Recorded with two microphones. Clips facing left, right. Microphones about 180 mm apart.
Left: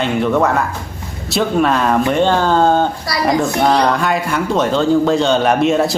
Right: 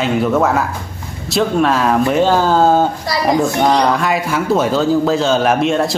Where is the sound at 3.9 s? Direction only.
Centre (ahead or behind).